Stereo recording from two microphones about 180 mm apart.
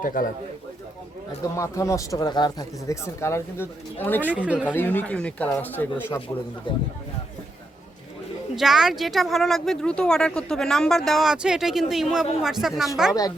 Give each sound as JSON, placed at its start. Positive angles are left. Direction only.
{"t": 0.0, "sound": "speech", "side_deg": 50}
{"t": 1.5, "sound": "speech", "side_deg": 15}
{"t": 4.3, "sound": "speech", "side_deg": -5}
{"t": 4.7, "sound": "speech", "side_deg": 10}
{"t": 6.7, "sound": "speech", "side_deg": 25}
{"t": 8.5, "sound": "speech", "side_deg": 0}